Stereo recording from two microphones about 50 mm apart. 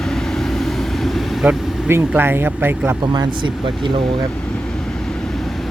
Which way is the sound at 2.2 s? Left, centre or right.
Right.